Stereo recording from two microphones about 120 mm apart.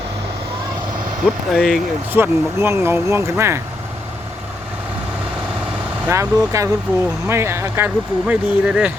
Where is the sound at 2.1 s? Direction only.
20° right (ahead or behind).